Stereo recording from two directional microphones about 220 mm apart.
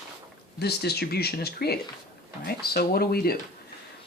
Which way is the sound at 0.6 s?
45° left (ahead or behind).